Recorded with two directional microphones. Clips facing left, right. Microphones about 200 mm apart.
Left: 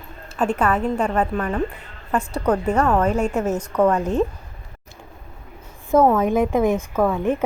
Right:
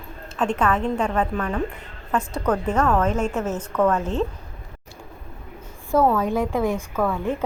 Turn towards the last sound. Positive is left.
turn(degrees=20)  # may be behind; listen again after turning